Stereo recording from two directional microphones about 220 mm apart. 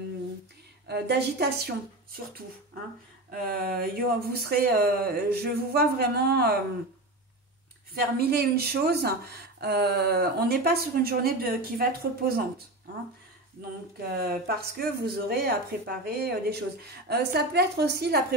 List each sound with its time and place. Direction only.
0.8 s a woman's voice: 50° right (ahead or behind)
3.3 s a woman's voice: 40° right (ahead or behind)
7.9 s a woman's voice: 45° right (ahead or behind)
14.1 s a woman's voice: 45° right (ahead or behind)